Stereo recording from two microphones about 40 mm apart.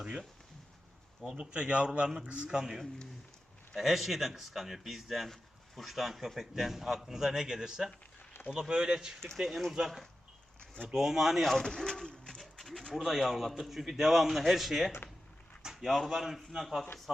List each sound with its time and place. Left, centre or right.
1.2 s a man's voice: centre
1.5 s a man's voice: right
3.8 s a man's voice: centre
9.8 s a man's voice: centre
10.8 s a man's voice: centre
11.5 s speech: centre
11.8 s pigeon: centre
12.5 s a sound: centre
12.9 s a man's voice: centre
15.6 s a sound: centre
15.9 s a man's voice: centre